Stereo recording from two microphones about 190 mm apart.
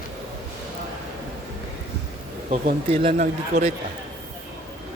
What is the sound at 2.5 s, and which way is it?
Speech, 35° right (ahead or behind).